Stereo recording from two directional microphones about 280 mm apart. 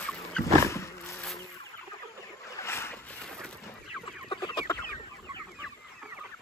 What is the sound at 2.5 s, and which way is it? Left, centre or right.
Boat, centre.